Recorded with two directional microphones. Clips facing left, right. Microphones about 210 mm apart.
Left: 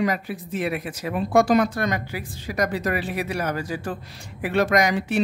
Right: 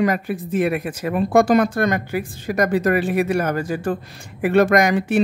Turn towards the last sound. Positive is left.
turn(degrees=-50)  # may be behind; listen again after turning